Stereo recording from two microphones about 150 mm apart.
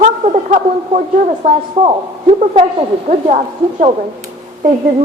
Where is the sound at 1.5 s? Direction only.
45° right (ahead or behind).